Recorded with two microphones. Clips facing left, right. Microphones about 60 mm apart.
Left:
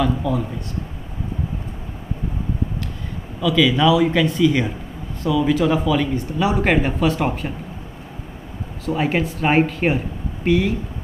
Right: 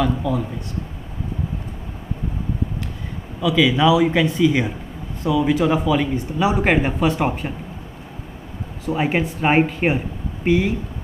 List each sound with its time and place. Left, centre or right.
0.0 s speech: centre
3.3 s speech: centre
8.8 s speech: centre